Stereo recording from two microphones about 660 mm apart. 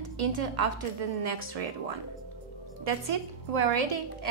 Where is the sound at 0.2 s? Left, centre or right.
Right.